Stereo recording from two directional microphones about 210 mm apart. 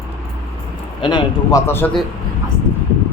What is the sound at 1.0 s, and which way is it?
Speech, 20° left (ahead or behind).